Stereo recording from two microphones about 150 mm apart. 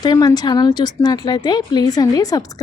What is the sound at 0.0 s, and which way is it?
A woman's voice, 25° left (ahead or behind).